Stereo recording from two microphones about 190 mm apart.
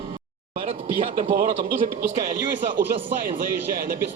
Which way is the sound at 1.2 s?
45° right (ahead or behind).